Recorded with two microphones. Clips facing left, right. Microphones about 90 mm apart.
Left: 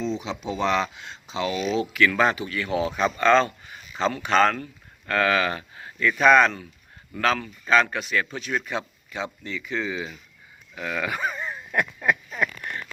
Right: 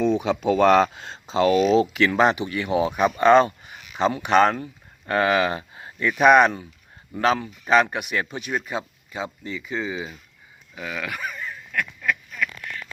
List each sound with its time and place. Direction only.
0.0 s speech: 55° right (ahead or behind); by 1.9 s 40° right (ahead or behind)
1.9 s speech: 25° right (ahead or behind); by 11.1 s 5° right (ahead or behind)
11.1 s a sound: 25° left (ahead or behind)